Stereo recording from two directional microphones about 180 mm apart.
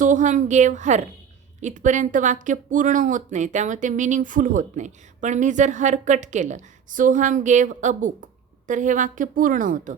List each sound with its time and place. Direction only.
0.0 s speech: 45° right (ahead or behind)